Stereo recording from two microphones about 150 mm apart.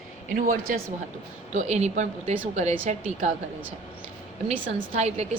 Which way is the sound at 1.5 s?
50° right (ahead or behind).